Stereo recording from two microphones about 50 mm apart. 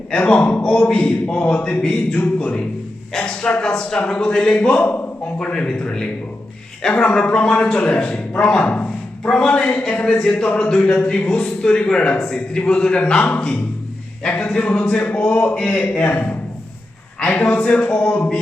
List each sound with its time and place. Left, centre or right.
0.1 s a man's voice: left
0.6 s a man's voice: centre
3.1 s a man's voice: centre
17.4 s a man's voice: left